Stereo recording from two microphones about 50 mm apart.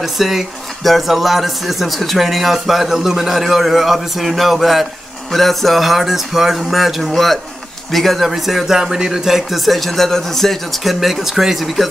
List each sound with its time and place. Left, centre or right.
0.0 s speech: centre